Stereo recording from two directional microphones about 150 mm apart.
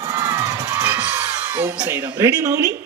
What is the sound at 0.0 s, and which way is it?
Music, 20° right (ahead or behind).